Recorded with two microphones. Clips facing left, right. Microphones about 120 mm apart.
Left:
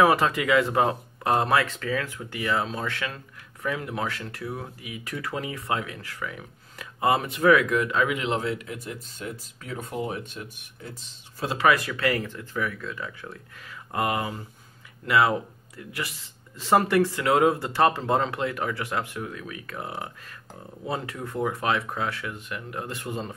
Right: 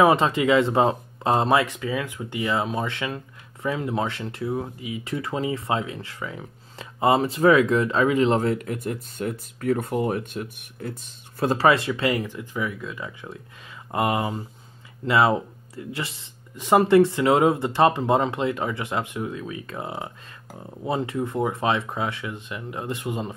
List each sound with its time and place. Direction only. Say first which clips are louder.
0.0 s speech: right 3 dB; 25° right (ahead or behind); by 11.5 s 55° right (ahead or behind)
11.5 s speech: right 2 dB; 30° right (ahead or behind)